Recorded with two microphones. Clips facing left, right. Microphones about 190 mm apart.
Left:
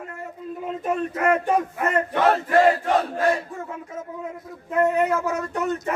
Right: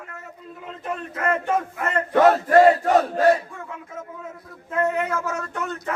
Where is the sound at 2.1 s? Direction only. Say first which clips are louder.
Right 6 dB; 40° right (ahead or behind).